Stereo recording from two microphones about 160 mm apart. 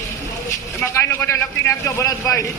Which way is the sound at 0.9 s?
15° left (ahead or behind).